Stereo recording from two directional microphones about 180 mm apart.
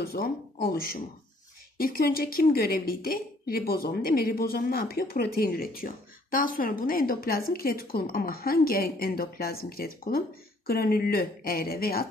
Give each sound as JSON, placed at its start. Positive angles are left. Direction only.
{"t": 0.0, "sound": "a woman's voice", "side_deg": 60}